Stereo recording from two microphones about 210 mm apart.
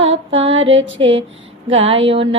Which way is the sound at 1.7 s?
25° right (ahead or behind).